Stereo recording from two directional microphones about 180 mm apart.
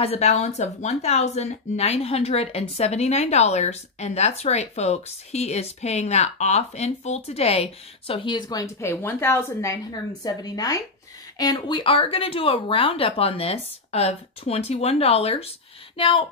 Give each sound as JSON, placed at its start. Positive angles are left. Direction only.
{"t": 0.0, "sound": "speech", "side_deg": 35}